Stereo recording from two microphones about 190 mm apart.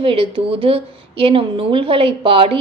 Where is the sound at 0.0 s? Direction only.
25° right (ahead or behind).